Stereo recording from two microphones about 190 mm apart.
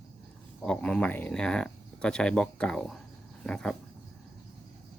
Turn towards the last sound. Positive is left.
turn(degrees=5)  # may be behind; listen again after turning